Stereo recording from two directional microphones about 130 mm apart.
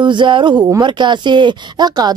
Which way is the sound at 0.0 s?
40° right (ahead or behind).